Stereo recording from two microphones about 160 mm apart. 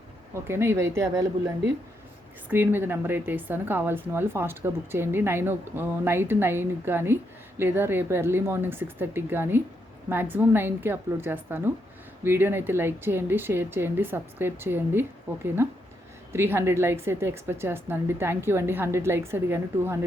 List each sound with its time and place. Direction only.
0.3 s speech: 15° right (ahead or behind)